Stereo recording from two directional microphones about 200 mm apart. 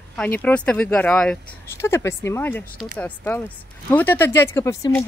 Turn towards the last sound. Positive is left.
turn(degrees=10)  # may be behind; listen again after turning